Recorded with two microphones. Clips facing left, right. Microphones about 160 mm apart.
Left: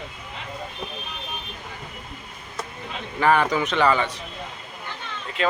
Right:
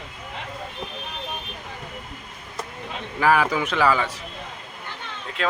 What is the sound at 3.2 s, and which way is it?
Speech, 5° right (ahead or behind).